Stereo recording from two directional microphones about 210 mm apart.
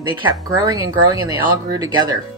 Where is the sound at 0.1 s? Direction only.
15° right (ahead or behind).